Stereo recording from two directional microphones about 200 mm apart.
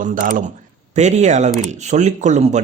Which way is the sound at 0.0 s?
40° right (ahead or behind).